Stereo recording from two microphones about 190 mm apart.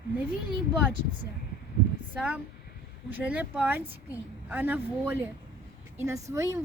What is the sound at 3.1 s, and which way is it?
A woman's voice, 10° right (ahead or behind).